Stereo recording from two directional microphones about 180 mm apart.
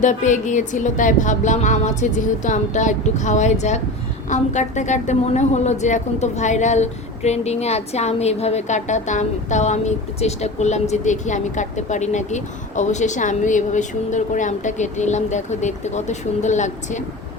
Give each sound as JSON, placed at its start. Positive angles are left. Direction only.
{"t": 0.0, "sound": "a woman's voice", "side_deg": 45}